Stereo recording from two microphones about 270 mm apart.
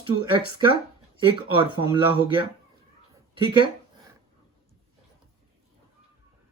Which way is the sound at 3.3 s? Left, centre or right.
Centre.